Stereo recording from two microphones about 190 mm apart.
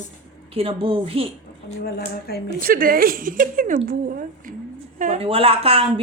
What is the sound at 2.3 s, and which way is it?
Speech, 55° left (ahead or behind).